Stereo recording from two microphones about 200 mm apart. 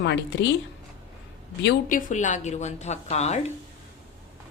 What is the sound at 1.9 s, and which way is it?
Speech, 40° left (ahead or behind).